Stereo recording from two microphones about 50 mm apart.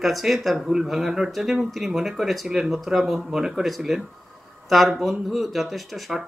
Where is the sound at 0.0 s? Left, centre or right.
Centre.